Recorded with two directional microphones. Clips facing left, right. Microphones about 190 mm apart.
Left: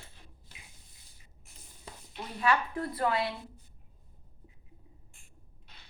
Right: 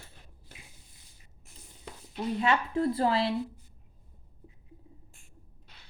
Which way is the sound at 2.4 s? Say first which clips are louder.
Right 2 dB; 25° right (ahead or behind).